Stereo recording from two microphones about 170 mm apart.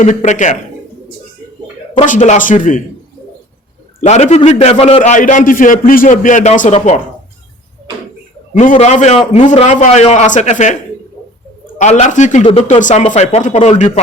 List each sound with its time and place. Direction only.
0.0 s a man's voice: 45° left (ahead or behind)
2.0 s a man's voice: 45° left (ahead or behind)
4.0 s a man's voice: 40° left (ahead or behind)
8.5 s a man's voice: 45° left (ahead or behind)
11.8 s a man's voice: 45° left (ahead or behind)